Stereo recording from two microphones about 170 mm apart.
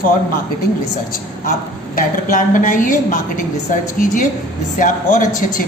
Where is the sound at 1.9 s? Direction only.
55° left (ahead or behind).